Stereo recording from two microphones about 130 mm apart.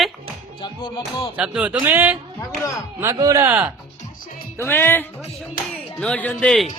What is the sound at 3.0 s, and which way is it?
Speech, 25° right (ahead or behind).